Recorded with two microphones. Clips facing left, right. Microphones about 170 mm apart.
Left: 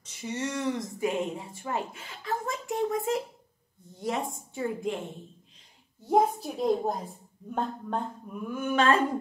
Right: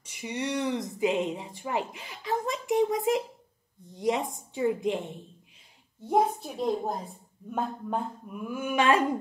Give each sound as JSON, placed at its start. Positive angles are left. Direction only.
{"t": 0.0, "sound": "a woman's voice", "side_deg": -10}
{"t": 6.0, "sound": "a woman's voice", "side_deg": 0}